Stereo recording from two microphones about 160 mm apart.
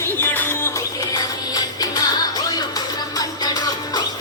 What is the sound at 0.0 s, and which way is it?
Music, 15° left (ahead or behind).